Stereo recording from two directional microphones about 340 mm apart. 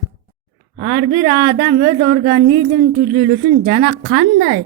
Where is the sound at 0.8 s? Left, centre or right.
Right.